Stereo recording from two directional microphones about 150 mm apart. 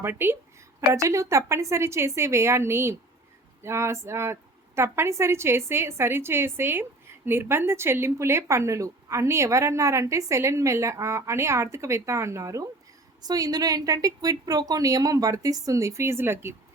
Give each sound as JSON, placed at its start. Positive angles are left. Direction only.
{"t": 0.0, "sound": "a woman's voice", "side_deg": -15}